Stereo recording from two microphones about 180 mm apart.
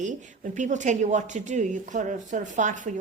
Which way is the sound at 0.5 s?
40° right (ahead or behind).